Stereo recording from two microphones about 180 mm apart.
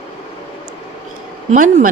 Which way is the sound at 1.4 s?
45° right (ahead or behind).